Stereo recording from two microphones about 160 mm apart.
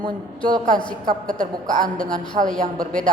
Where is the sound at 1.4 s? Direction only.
60° right (ahead or behind).